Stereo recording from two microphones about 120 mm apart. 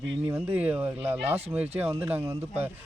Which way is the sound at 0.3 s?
15° right (ahead or behind).